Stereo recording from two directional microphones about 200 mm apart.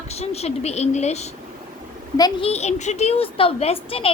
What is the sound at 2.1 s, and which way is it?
Speech, 20° left (ahead or behind).